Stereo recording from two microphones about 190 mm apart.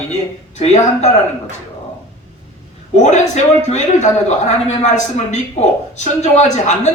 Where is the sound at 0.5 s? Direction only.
35° left (ahead or behind).